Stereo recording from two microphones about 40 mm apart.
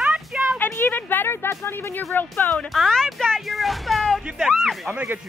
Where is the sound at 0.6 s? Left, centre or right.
Left.